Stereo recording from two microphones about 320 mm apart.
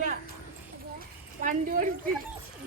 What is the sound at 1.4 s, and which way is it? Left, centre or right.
Speech, right.